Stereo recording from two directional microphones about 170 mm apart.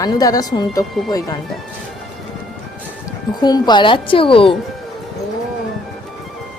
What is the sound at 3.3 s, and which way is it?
A woman's voice, 25° left (ahead or behind).